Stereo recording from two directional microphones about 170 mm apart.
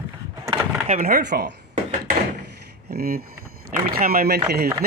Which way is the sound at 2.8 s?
65° right (ahead or behind).